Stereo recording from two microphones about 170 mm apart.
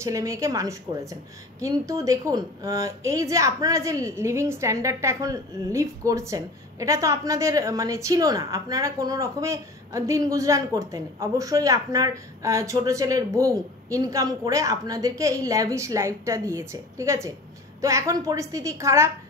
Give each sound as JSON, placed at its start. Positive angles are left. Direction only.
{"t": 0.0, "sound": "a woman's voice", "side_deg": -20}